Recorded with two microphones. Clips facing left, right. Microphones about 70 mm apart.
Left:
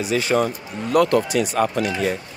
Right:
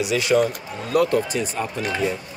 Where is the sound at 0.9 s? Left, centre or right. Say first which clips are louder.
Left 3 dB; left.